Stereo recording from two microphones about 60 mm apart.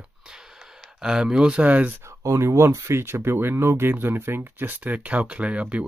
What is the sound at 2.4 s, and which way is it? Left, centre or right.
Speech, right.